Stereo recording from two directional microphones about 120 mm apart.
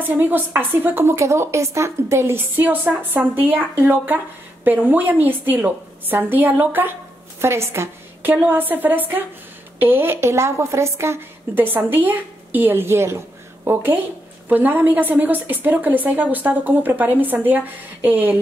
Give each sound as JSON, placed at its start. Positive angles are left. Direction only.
{"t": 0.1, "sound": "a woman's voice", "side_deg": -20}